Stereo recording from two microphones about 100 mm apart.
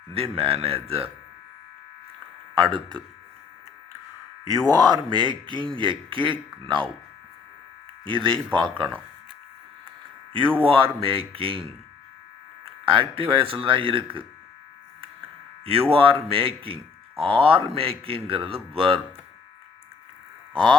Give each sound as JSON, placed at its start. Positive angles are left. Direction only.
{"t": 0.1, "sound": "speech", "side_deg": -75}
{"t": 2.6, "sound": "speech", "side_deg": -55}
{"t": 4.4, "sound": "speech", "side_deg": -40}
{"t": 8.0, "sound": "speech", "side_deg": -55}
{"t": 10.6, "sound": "speech", "side_deg": -65}
{"t": 12.8, "sound": "speech", "side_deg": -60}
{"t": 15.6, "sound": "speech", "side_deg": -70}
{"t": 20.5, "sound": "speech", "side_deg": -55}